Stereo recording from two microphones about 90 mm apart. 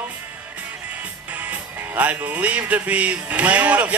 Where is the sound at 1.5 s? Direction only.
15° right (ahead or behind).